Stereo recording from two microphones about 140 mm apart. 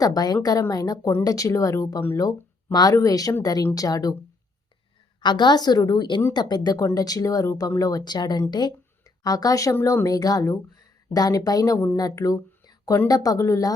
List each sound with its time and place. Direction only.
0.0 s speech: 25° left (ahead or behind)
5.2 s a woman's voice: 30° left (ahead or behind)